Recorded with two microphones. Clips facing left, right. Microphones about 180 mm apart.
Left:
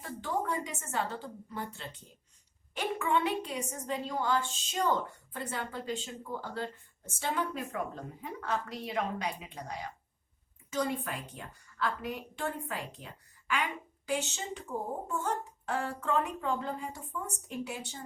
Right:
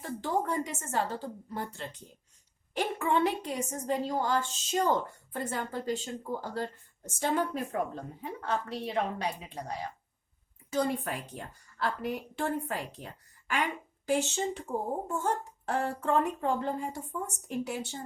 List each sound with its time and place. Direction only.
0.0 s a woman's voice: 40° right (ahead or behind)